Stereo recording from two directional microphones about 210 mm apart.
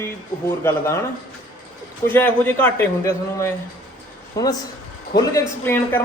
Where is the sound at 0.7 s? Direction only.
10° left (ahead or behind).